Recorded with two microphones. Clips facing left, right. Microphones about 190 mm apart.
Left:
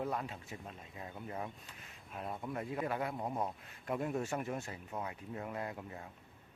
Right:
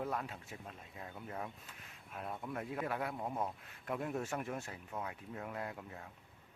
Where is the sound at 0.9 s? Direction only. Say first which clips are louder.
Left 2 dB; 5° left (ahead or behind).